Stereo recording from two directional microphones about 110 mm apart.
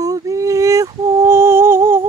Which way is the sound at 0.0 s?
35° right (ahead or behind).